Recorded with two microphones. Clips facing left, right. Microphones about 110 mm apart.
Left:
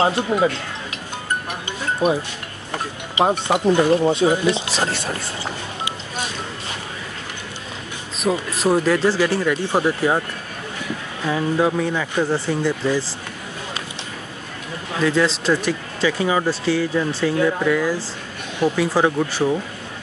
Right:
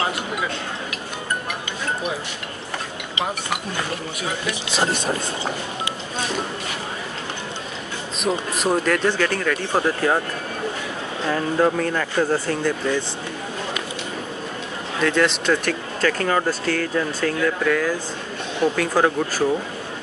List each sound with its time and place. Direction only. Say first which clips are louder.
0.0 s speech: left 7 dB; 30° left (ahead or behind)
3.2 s speech: left 9 dB; 30° left (ahead or behind)
4.9 s speech: right 3 dB; 20° right (ahead or behind)
8.3 s speech: left 3 dB; 5° left (ahead or behind)
11.2 s speech: left 1 dB; 10° left (ahead or behind)
15.0 s speech: left 1 dB; 5° left (ahead or behind)